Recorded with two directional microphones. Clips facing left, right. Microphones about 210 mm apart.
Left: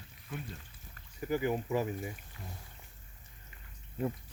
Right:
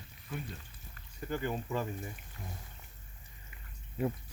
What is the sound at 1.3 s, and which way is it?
Speech, 10° left (ahead or behind).